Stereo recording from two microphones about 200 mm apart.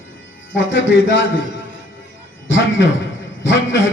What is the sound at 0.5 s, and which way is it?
Speech, 70° left (ahead or behind).